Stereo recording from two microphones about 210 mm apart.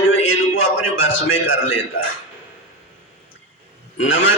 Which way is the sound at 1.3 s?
70° left (ahead or behind).